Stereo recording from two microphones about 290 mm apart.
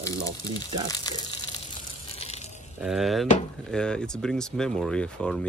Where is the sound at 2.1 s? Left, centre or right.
Left.